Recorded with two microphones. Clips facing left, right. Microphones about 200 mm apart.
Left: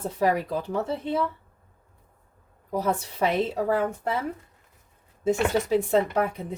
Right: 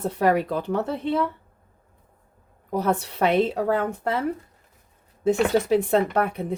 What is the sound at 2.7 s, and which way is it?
Speech, 65° right (ahead or behind).